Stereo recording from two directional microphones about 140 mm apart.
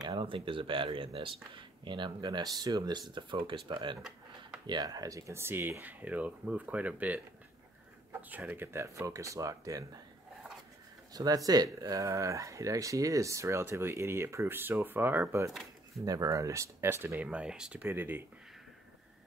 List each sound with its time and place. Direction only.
0.1 s speech: 40° right (ahead or behind)
11.1 s speech: 25° right (ahead or behind)